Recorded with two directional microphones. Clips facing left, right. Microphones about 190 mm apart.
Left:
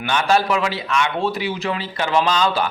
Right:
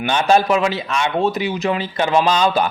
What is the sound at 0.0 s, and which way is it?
A man's voice, 20° right (ahead or behind).